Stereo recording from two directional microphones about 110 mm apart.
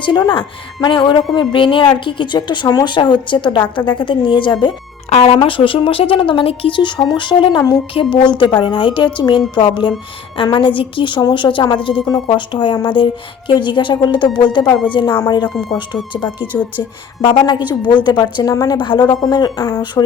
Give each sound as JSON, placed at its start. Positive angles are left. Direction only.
{"t": 0.0, "sound": "speech", "side_deg": 45}
{"t": 5.0, "sound": "speech", "side_deg": 70}
{"t": 5.4, "sound": "speech", "side_deg": 50}
{"t": 12.0, "sound": "speech", "side_deg": 40}
{"t": 15.4, "sound": "speech", "side_deg": 0}
{"t": 16.5, "sound": "speech", "side_deg": 20}
{"t": 17.2, "sound": "speech", "side_deg": 40}
{"t": 18.4, "sound": "speech", "side_deg": 30}
{"t": 18.8, "sound": "speech", "side_deg": 45}